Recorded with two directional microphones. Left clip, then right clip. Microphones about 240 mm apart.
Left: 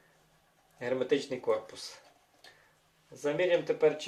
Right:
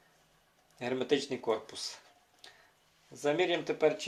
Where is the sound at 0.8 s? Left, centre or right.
Right.